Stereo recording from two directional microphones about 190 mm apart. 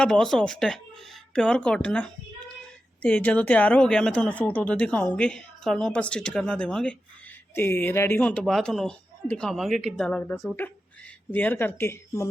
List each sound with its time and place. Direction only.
0.0 s speech: 5° left (ahead or behind)